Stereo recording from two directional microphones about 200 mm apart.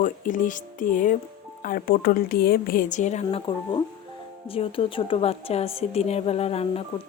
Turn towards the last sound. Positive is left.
turn(degrees=30)  # may be behind; listen again after turning